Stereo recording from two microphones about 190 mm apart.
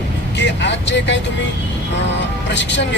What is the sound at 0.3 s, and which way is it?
Speech, 70° left (ahead or behind).